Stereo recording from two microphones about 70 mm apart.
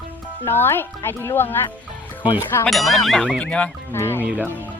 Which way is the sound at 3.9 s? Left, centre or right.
Left.